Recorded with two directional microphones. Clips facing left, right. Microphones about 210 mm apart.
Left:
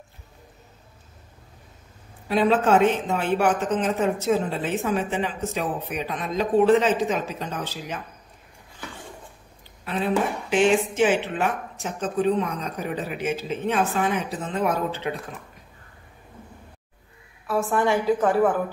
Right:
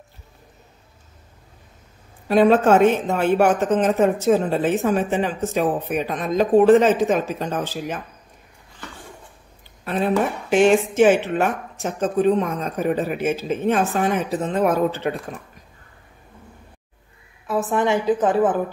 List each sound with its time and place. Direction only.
2.2 s speech: 50° right (ahead or behind)
9.8 s speech: 45° right (ahead or behind)
17.5 s a woman's voice: 20° right (ahead or behind)